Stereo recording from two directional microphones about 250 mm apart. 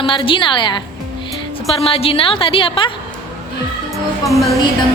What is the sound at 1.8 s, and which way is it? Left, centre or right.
A woman's voice, left.